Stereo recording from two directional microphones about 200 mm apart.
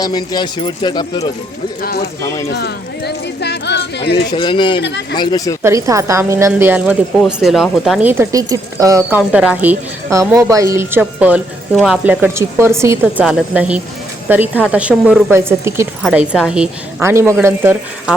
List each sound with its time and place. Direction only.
0.0 s speech: 20° left (ahead or behind)
1.8 s speech: 50° left (ahead or behind)
2.2 s speech: 15° left (ahead or behind)
2.5 s a sound: 55° left (ahead or behind)
4.3 s speech: 25° left (ahead or behind)
4.8 s speech: 60° left (ahead or behind)
5.1 s speech: 20° left (ahead or behind)
5.6 s speech: 15° right (ahead or behind)